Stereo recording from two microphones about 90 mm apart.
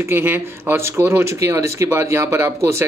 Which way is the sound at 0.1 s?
25° right (ahead or behind).